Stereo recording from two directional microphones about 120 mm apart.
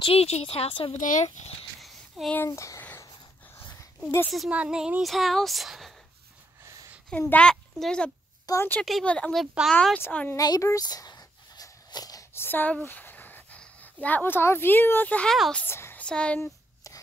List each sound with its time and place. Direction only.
0.0 s a woman's voice: 55° left (ahead or behind)
0.9 s speech: 90° left
1.8 s a sound: centre (ahead or behind)
2.3 s speech: 20° left (ahead or behind)
4.3 s speech: centre (ahead or behind)
7.1 s a child's voice: 10° left (ahead or behind)
8.5 s speech: 30° left (ahead or behind)
8.8 s speech: 5° left (ahead or behind)
9.9 s speech: 15° left (ahead or behind)
10.3 s a sound: 30° left (ahead or behind)
12.4 s a sound: 15° left (ahead or behind)
14.0 s speech: 15° left (ahead or behind)
16.0 s speech: 10° left (ahead or behind)
16.3 s a sound: 25° left (ahead or behind)